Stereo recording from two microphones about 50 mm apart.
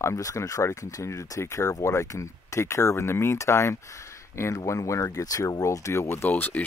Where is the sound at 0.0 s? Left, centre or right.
Left.